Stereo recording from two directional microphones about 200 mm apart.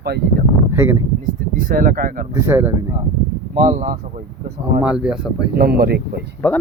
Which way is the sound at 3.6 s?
40° right (ahead or behind).